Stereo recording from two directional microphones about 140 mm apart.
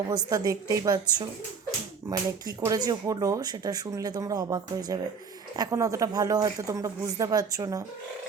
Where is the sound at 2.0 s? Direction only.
25° right (ahead or behind).